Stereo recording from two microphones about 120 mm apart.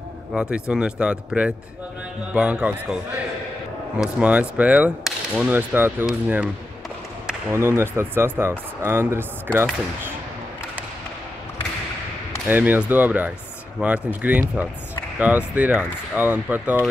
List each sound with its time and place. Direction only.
0.3 s whip: 5° right (ahead or behind)
7.5 s speech: 20° right (ahead or behind)
12.4 s whip: 15° right (ahead or behind)